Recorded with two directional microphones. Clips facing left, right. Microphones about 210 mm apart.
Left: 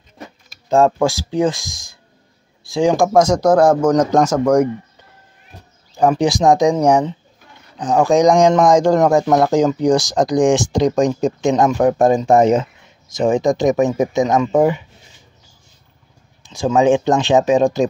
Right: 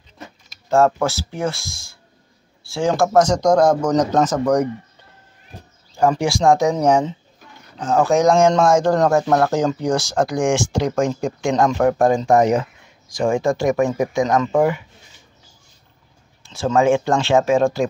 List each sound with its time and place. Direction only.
0.7 s speech: 15° left (ahead or behind)
5.9 s speech: 20° left (ahead or behind)
16.4 s speech: 15° left (ahead or behind)